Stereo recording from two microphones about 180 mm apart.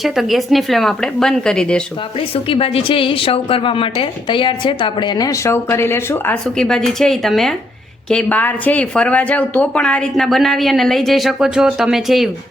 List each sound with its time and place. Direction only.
0.0 s speech: centre (ahead or behind)
2.3 s a woman's voice: 30° left (ahead or behind); by 12.3 s centre (ahead or behind)